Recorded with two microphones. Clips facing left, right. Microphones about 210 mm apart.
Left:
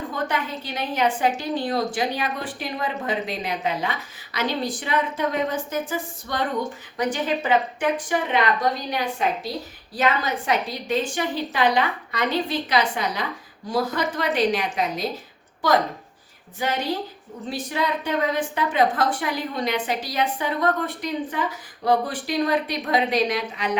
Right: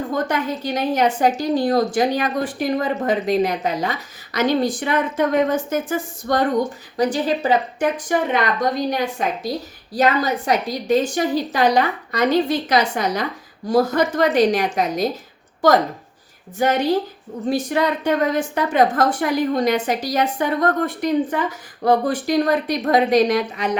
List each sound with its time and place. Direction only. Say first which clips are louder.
0.1 s a woman's voice: right 6 dB; 40° right (ahead or behind)